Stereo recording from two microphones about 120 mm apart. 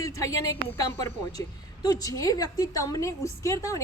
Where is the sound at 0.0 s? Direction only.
25° left (ahead or behind).